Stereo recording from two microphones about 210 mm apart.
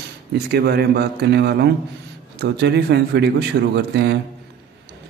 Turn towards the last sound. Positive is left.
turn(degrees=-55)  # may be behind; listen again after turning